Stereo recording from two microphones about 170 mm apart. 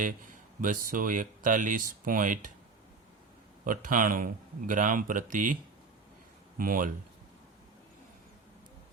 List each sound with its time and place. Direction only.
0.6 s speech: 55° right (ahead or behind)
3.6 s speech: 50° right (ahead or behind)
6.6 s speech: 55° right (ahead or behind)